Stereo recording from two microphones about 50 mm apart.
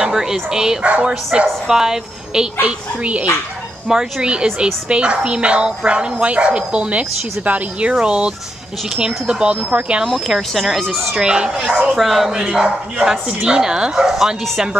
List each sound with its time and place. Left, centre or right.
0.0 s speech: centre
0.8 s speech: right
3.9 s speech: centre
9.7 s speech: right
10.0 s speech: centre
11.1 s speech: centre
11.9 s speech: centre
12.4 s speech: centre